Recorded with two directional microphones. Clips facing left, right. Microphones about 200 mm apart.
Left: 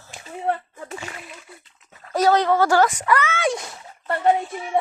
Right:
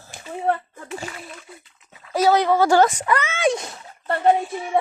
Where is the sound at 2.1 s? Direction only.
10° right (ahead or behind).